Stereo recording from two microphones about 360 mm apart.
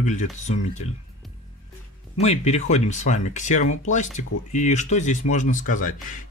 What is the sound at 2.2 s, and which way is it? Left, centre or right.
Speech, centre.